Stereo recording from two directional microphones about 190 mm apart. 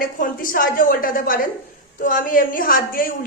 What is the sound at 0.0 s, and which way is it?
A woman's voice, 50° left (ahead or behind).